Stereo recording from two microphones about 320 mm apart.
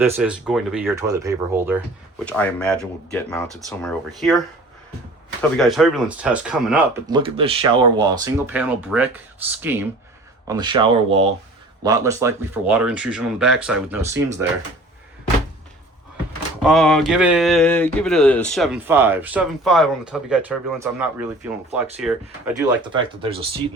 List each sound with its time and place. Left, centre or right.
0.0 s speech: centre
16.6 s speech: centre
23.0 s speech: centre